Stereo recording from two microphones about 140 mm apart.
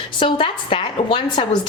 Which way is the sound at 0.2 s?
35° left (ahead or behind).